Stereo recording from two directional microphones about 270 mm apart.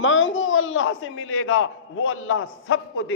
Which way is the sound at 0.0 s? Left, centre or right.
Left.